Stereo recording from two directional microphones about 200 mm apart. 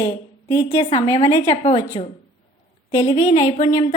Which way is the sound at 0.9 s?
30° left (ahead or behind).